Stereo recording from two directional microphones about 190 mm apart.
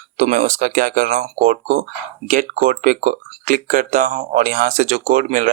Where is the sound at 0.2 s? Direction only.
40° right (ahead or behind).